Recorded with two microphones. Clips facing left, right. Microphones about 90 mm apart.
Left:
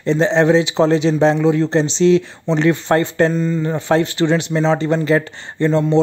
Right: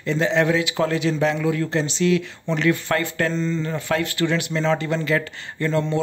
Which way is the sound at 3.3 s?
10° left (ahead or behind).